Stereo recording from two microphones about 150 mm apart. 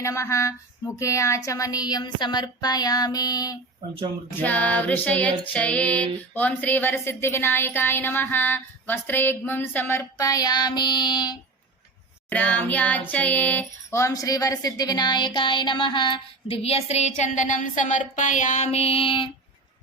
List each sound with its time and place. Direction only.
0.0 s a sound: 20° left (ahead or behind)
4.4 s female singing: 10° left (ahead or behind); by 11.3 s 30° left (ahead or behind)
12.3 s speech: 10° left (ahead or behind); by 19.3 s 35° left (ahead or behind)